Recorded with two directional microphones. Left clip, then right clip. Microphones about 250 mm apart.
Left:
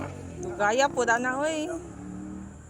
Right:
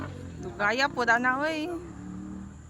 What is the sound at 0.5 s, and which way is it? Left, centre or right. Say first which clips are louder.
Speech: left 2 dB; centre.